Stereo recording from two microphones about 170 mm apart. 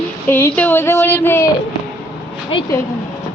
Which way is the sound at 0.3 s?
10° left (ahead or behind).